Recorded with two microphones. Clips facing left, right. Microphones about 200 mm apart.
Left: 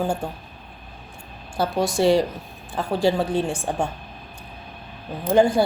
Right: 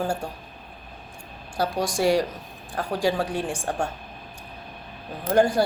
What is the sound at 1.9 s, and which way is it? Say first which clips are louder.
A woman's voice: left 3 dB; 10° right (ahead or behind).